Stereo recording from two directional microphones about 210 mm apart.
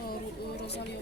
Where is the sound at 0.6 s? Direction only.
55° left (ahead or behind).